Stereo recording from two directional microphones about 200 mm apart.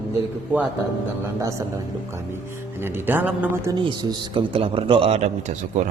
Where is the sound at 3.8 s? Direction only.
25° right (ahead or behind).